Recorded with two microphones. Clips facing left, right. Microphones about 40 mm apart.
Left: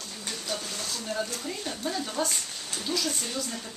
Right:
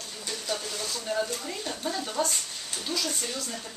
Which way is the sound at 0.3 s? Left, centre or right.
Centre.